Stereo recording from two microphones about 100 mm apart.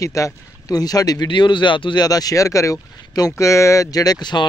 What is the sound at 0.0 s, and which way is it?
Speech, 35° left (ahead or behind).